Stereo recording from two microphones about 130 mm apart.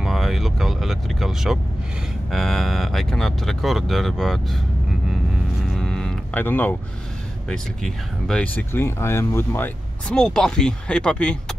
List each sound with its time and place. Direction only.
0.0 s vehicle: centre (ahead or behind)
2.3 s speech: centre (ahead or behind)
5.7 s a sound: 5° left (ahead or behind)
6.4 s speech: 15° left (ahead or behind)